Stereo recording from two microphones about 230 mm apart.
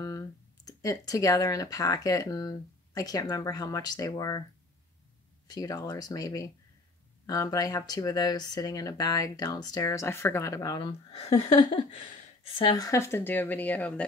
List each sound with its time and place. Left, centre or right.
0.0 s speech: centre
5.5 s speech: centre
11.6 s a sound: left
12.5 s speech: centre